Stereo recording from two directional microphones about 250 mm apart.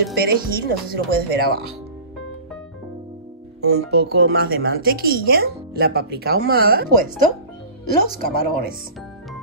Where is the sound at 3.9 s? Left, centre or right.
Right.